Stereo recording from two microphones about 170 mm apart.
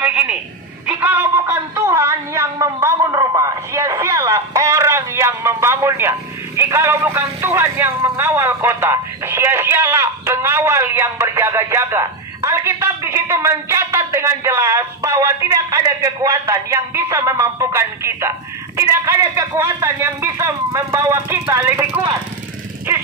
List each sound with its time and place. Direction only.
0.0 s telephone: 5° right (ahead or behind)
0.8 s a man's voice: 10° right (ahead or behind)